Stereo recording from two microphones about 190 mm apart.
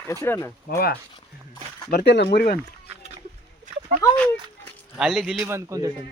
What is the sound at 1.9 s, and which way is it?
Speech, 65° left (ahead or behind).